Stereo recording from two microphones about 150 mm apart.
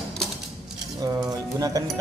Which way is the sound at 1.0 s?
25° right (ahead or behind).